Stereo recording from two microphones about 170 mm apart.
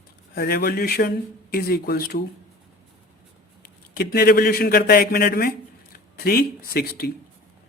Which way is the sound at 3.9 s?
65° left (ahead or behind).